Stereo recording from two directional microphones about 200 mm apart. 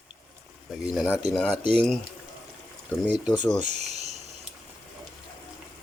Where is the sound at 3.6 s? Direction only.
35° right (ahead or behind).